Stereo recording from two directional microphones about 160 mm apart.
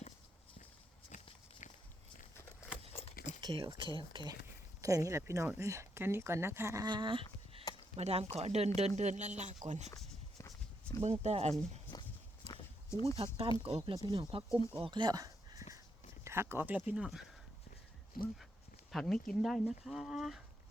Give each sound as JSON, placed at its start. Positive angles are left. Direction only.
{"t": 1.1, "sound": "walk", "side_deg": 50}
{"t": 3.4, "sound": "speech", "side_deg": -25}
{"t": 6.8, "sound": "speech", "side_deg": -30}
{"t": 7.9, "sound": "speech", "side_deg": -40}
{"t": 11.0, "sound": "speech", "side_deg": -45}
{"t": 12.5, "sound": "horse", "side_deg": 20}
{"t": 13.1, "sound": "speech", "side_deg": -40}
{"t": 18.9, "sound": "speech", "side_deg": 0}